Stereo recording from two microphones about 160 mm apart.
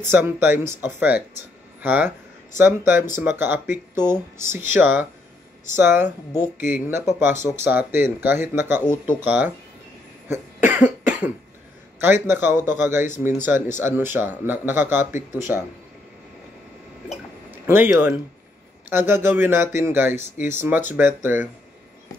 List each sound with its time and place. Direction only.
0.1 s speech: 15° right (ahead or behind)
10.2 s cough: 15° right (ahead or behind)
12.0 s speech: 15° right (ahead or behind)
17.6 s speech: 15° right (ahead or behind)